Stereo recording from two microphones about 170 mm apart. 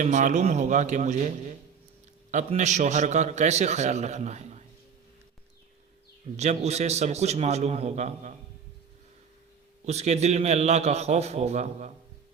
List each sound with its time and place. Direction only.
0.0 s a man's voice: 45° right (ahead or behind)
6.3 s a man's voice: 40° right (ahead or behind)
9.8 s a man's voice: 40° right (ahead or behind)